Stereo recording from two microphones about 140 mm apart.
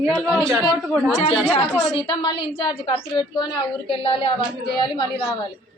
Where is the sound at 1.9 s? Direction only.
35° left (ahead or behind).